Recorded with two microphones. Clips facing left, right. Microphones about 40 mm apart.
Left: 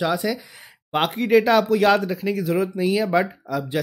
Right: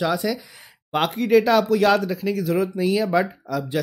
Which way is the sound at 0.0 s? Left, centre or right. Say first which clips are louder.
Even; centre.